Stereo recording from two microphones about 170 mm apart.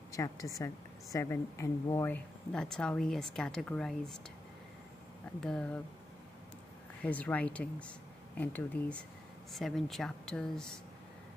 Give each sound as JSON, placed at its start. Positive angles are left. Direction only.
{"t": 0.1, "sound": "a woman's voice", "side_deg": 20}
{"t": 5.4, "sound": "speech", "side_deg": 5}
{"t": 7.0, "sound": "speech", "side_deg": 10}